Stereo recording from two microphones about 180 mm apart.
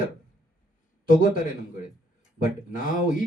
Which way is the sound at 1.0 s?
50° left (ahead or behind).